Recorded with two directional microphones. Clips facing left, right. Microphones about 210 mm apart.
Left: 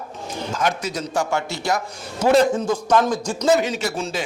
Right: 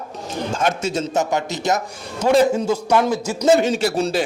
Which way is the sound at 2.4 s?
10° right (ahead or behind).